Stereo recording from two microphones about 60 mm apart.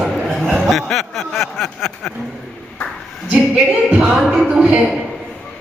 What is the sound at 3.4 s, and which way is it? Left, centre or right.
Speech, right.